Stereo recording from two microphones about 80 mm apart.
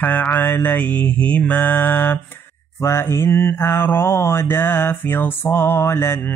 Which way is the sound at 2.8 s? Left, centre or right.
Left.